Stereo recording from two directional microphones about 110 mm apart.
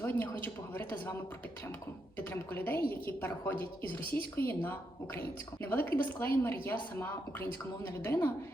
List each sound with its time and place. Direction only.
0.0 s a woman's voice: 20° left (ahead or behind)
2.1 s a woman's voice: 15° left (ahead or behind)